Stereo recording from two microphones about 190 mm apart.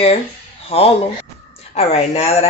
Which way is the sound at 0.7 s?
30° left (ahead or behind).